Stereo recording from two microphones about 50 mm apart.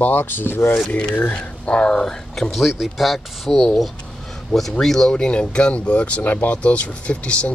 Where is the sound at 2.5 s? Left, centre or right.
Centre.